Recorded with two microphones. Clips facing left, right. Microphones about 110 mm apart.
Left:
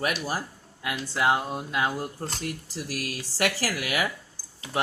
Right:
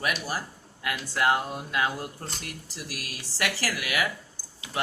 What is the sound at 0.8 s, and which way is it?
Speech, 20° left (ahead or behind).